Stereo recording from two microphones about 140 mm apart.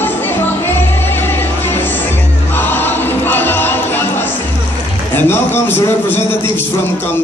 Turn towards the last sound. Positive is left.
turn(degrees=15)  # may be behind; listen again after turning